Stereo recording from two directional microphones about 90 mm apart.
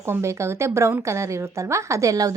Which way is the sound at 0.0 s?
30° right (ahead or behind).